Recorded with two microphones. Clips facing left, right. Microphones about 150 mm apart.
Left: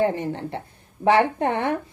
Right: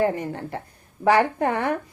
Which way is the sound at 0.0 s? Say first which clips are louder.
Left 1 dB; 25° left (ahead or behind).